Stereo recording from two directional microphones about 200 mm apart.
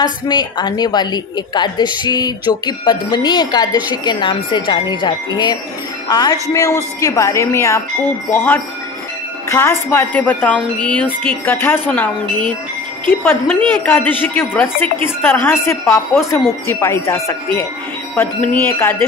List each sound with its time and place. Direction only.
0.0 s a woman's voice: 20° left (ahead or behind)